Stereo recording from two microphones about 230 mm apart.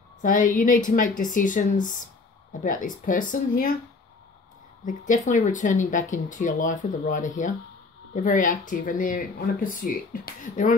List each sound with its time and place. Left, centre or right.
0.2 s speech: left
4.8 s speech: left